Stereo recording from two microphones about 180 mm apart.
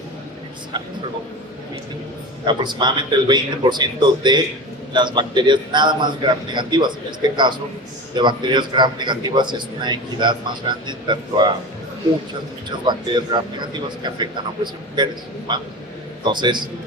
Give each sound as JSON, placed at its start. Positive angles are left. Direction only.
{"t": 2.5, "sound": "a man's voice", "side_deg": -25}
{"t": 12.8, "sound": "a man's voice", "side_deg": -25}